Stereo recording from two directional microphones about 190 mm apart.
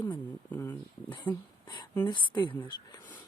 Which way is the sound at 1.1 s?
25° left (ahead or behind).